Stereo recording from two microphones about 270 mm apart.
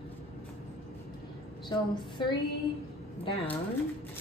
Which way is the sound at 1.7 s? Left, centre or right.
Centre.